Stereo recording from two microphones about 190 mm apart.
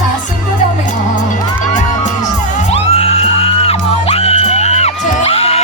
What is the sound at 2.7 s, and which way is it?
Music, 30° left (ahead or behind).